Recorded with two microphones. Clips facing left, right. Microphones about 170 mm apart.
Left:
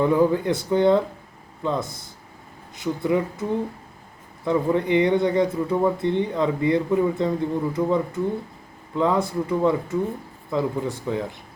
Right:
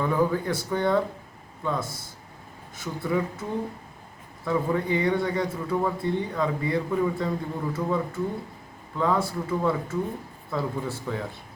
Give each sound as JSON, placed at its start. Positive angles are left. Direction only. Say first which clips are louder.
{"t": 0.0, "sound": "speech", "louder": "left 5 dB", "side_deg": 20}
{"t": 4.4, "sound": "speech", "louder": "left 4 dB", "side_deg": 20}